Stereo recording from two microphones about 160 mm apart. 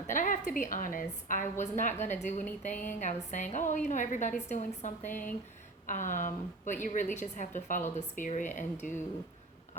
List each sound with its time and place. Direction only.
0.1 s a woman's voice: 55° left (ahead or behind)